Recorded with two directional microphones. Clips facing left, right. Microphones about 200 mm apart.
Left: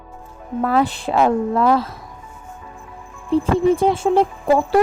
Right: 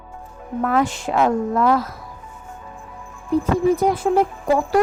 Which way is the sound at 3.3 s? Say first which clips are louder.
Left 2 dB; 30° left (ahead or behind).